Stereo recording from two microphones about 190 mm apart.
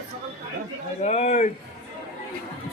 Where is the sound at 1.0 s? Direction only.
40° left (ahead or behind).